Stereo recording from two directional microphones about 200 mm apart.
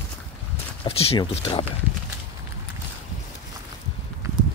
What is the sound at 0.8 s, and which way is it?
Speech, 30° left (ahead or behind).